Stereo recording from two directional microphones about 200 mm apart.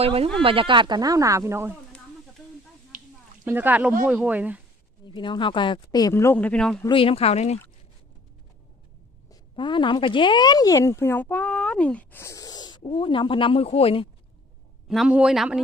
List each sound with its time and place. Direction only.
0.0 s speech: 30° right (ahead or behind); by 1.7 s 15° right (ahead or behind)
2.9 s finger snapping: 40° right (ahead or behind)
3.4 s speech: 10° right (ahead or behind)
5.0 s speech: 25° left (ahead or behind); by 6.8 s 5° left (ahead or behind)
6.8 s speech: 25° left (ahead or behind)
9.3 s speech: 20° left (ahead or behind)
14.8 s speech: 5° right (ahead or behind)